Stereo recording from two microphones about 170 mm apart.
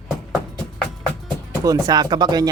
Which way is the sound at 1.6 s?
25° right (ahead or behind).